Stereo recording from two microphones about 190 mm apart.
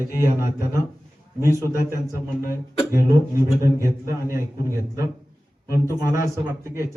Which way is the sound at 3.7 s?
15° right (ahead or behind).